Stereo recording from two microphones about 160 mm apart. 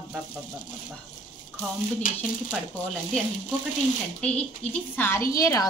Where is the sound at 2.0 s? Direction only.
60° left (ahead or behind).